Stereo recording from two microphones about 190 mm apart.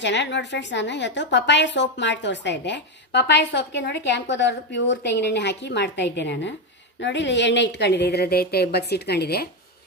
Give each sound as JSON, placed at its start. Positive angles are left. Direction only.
{"t": 0.0, "sound": "a woman's voice", "side_deg": 65}